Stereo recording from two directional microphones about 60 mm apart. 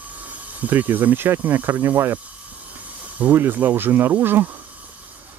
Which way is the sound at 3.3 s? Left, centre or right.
Right.